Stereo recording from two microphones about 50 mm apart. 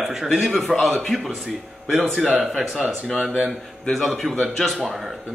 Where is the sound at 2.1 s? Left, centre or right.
Right.